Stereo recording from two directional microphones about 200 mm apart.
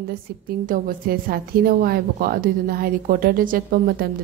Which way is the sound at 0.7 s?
45° right (ahead or behind).